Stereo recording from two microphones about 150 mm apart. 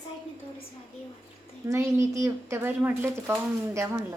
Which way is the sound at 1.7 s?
20° right (ahead or behind).